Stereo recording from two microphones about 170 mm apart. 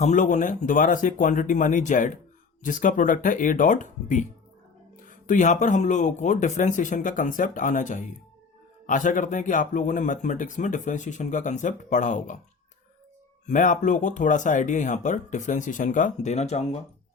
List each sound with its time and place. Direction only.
0.0 s speech: 45° left (ahead or behind)
13.4 s speech: 50° left (ahead or behind)